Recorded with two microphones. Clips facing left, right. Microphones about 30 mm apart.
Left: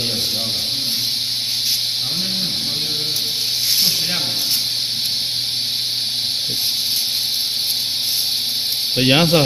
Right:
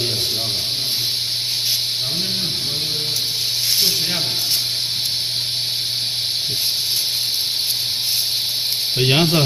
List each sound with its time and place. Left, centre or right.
8.9 s speech: centre